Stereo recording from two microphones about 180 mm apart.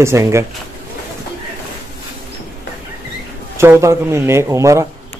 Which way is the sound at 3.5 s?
15° right (ahead or behind).